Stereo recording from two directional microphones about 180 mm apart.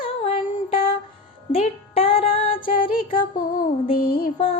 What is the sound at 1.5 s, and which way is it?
Music, 35° left (ahead or behind).